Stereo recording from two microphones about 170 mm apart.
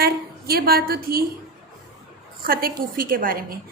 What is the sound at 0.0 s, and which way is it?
A woman's voice, 65° right (ahead or behind).